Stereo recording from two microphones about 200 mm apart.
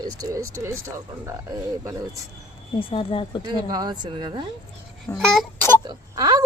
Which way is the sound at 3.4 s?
20° right (ahead or behind).